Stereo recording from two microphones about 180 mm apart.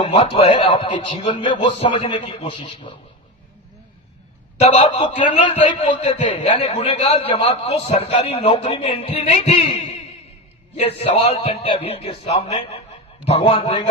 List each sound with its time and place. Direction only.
0.1 s a man's voice: 35° left (ahead or behind)
4.6 s a man's voice: 35° left (ahead or behind)